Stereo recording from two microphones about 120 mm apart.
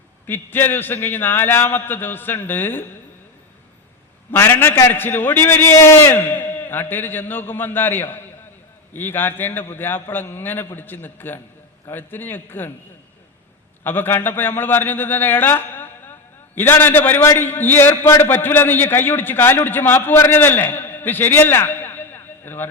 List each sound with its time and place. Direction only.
0.3 s a man's voice: 15° left (ahead or behind)
4.3 s a man's voice: 15° left (ahead or behind)
13.8 s a man's voice: 15° left (ahead or behind)